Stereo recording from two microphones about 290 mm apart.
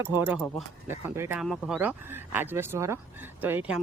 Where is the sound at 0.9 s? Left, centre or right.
Centre.